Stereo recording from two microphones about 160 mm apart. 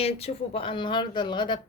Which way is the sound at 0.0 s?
40° left (ahead or behind).